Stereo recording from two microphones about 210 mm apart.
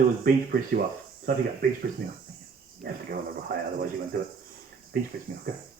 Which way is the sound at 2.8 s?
45° right (ahead or behind).